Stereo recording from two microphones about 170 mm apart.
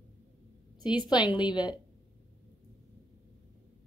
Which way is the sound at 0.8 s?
25° left (ahead or behind).